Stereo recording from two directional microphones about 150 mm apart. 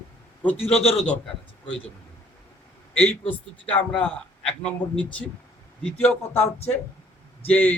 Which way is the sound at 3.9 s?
5° left (ahead or behind).